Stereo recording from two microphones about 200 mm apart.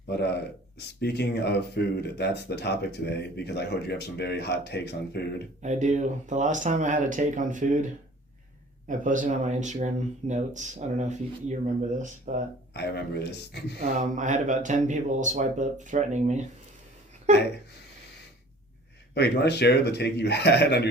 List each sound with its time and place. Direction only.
0.1 s speech: 55° left (ahead or behind)
5.6 s speech: 35° right (ahead or behind)
8.9 s speech: 40° right (ahead or behind)
12.7 s speech: 55° left (ahead or behind)
13.7 s speech: 40° right (ahead or behind)
19.1 s speech: 55° left (ahead or behind)